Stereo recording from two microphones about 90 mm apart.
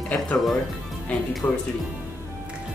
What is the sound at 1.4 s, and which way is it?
Speech, 25° left (ahead or behind).